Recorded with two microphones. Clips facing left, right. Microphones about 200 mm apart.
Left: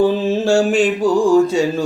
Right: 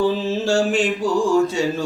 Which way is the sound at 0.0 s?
50° left (ahead or behind).